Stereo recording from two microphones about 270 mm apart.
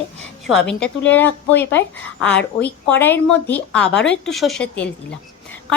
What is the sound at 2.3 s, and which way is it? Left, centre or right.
Speech, left.